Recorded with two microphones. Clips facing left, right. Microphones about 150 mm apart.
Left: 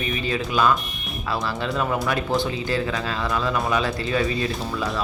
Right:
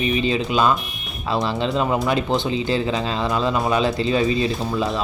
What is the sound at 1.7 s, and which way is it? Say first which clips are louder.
Speech: right 3 dB; 25° right (ahead or behind).